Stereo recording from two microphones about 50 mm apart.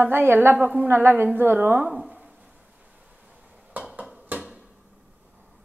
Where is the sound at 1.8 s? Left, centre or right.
Centre.